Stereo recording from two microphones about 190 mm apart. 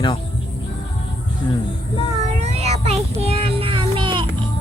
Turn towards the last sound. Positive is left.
turn(degrees=-25)  # may be behind; listen again after turning